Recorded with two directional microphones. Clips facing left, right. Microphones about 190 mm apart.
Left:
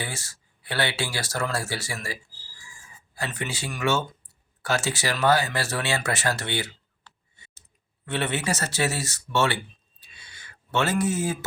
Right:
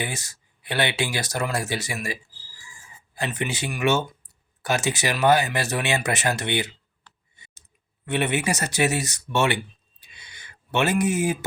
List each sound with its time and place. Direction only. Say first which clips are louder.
0.0 s speech: right 3 dB; 15° right (ahead or behind)
3.2 s speech: right 4 dB; 20° right (ahead or behind)
7.3 s clicking: right 1 dB; 15° right (ahead or behind)
8.0 s speech: right 3 dB; 15° right (ahead or behind)
10.0 s a sound: right 2 dB; 15° right (ahead or behind)